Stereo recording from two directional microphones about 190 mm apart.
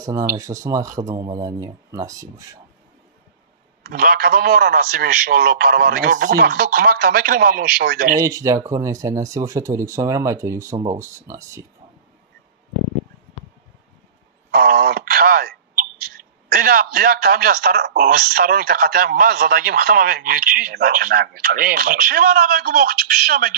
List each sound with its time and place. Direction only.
0.0 s speech: 20° right (ahead or behind)
3.8 s a man's voice: 50° right (ahead or behind)
8.2 s speech: 15° right (ahead or behind)
14.5 s a man's voice: 50° right (ahead or behind)